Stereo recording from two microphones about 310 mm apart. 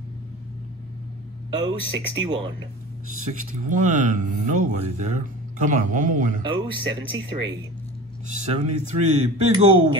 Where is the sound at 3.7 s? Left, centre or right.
Right.